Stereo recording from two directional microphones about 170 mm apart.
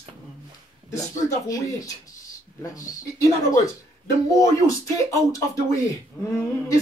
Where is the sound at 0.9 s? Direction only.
20° left (ahead or behind).